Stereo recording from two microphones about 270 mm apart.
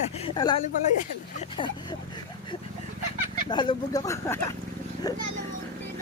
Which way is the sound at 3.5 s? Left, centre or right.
Centre.